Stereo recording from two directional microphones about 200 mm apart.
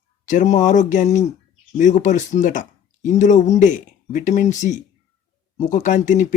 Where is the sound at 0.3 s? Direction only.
35° left (ahead or behind).